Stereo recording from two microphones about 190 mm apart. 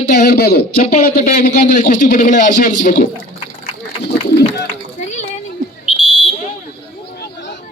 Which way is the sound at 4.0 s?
60° left (ahead or behind).